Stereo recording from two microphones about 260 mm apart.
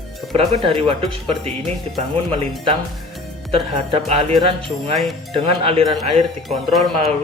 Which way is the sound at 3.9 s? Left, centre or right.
Right.